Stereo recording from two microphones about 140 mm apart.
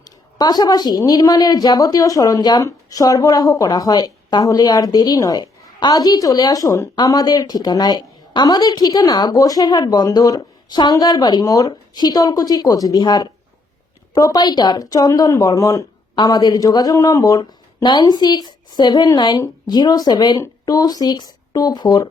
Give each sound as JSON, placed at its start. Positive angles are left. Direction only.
{"t": 0.0, "sound": "a woman's voice", "side_deg": 30}